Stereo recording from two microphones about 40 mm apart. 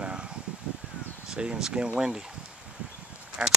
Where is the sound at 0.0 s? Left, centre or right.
Right.